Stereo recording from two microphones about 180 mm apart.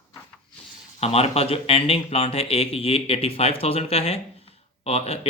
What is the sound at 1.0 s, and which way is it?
Speech, 35° left (ahead or behind).